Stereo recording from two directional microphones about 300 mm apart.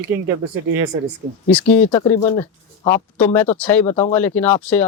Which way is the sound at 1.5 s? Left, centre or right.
Centre.